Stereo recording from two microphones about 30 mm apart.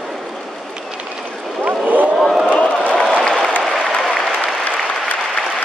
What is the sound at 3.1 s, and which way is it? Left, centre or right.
Applause, centre.